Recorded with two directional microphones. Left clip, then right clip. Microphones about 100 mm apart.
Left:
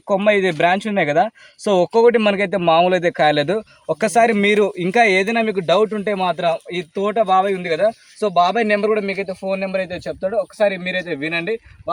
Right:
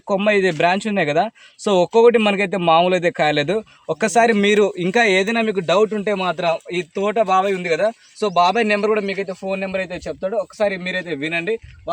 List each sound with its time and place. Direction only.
0.1 s speech: 25° right (ahead or behind)